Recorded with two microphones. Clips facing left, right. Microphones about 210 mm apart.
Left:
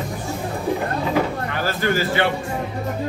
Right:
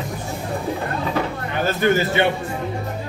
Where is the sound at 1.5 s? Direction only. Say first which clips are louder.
Right 6 dB; 20° right (ahead or behind).